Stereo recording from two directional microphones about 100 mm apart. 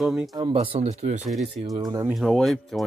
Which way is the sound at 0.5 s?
90° right.